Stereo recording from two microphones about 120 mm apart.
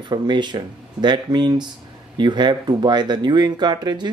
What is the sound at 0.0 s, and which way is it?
Speech, 40° right (ahead or behind).